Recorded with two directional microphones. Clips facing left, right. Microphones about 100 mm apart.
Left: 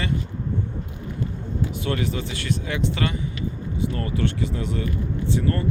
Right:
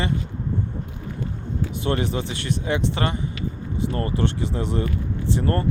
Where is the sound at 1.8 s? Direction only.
25° right (ahead or behind).